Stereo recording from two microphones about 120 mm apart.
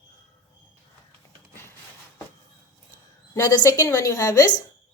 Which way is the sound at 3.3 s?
30° left (ahead or behind).